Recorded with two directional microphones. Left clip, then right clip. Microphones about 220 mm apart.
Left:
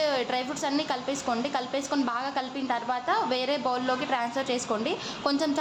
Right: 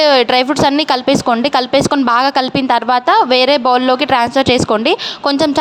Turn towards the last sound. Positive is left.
turn(degrees=-45)  # may be behind; listen again after turning